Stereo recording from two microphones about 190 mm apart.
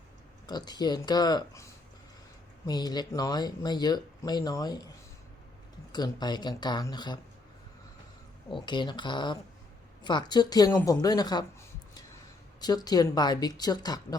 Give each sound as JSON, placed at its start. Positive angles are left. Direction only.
{"t": 0.4, "sound": "speech", "side_deg": 20}
{"t": 2.6, "sound": "speech", "side_deg": 20}
{"t": 5.9, "sound": "speech", "side_deg": 20}
{"t": 8.4, "sound": "speech", "side_deg": 25}
{"t": 12.5, "sound": "speech", "side_deg": 20}